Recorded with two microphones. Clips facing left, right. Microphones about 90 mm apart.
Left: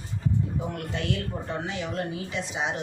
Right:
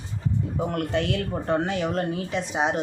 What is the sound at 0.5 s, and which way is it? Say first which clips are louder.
Speech: right 6 dB; 55° right (ahead or behind).